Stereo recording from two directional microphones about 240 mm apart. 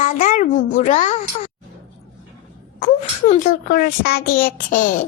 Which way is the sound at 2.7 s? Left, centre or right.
Left.